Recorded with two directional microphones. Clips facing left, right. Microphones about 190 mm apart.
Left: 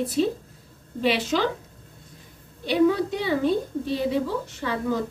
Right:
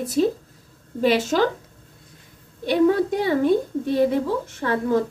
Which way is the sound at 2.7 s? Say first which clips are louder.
Right 2 dB; 50° right (ahead or behind).